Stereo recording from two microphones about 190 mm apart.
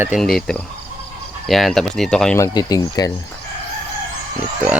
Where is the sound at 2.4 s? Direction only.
20° left (ahead or behind).